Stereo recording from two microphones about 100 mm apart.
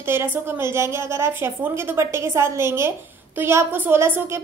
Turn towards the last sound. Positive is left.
turn(degrees=-25)  # may be behind; listen again after turning